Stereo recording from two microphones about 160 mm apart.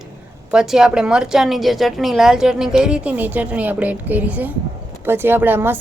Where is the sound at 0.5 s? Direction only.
5° right (ahead or behind).